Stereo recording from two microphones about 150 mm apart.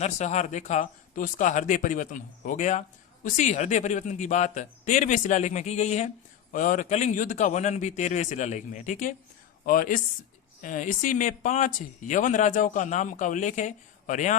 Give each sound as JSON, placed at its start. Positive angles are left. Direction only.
{"t": 0.0, "sound": "a man's voice", "side_deg": 50}
{"t": 6.5, "sound": "a man's voice", "side_deg": 60}
{"t": 9.6, "sound": "speech", "side_deg": 70}